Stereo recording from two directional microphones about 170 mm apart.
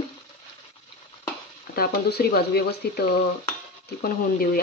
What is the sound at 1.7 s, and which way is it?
Speech, 65° left (ahead or behind).